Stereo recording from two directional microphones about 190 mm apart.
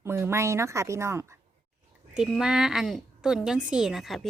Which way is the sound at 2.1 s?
5° right (ahead or behind).